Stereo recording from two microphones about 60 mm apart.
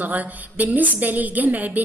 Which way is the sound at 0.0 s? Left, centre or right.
Right.